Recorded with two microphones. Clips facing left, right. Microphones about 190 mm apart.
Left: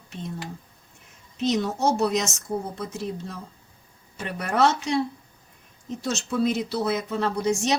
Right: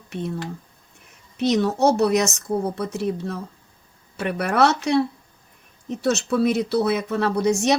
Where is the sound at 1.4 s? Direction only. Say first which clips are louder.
Right 5 dB; 65° right (ahead or behind).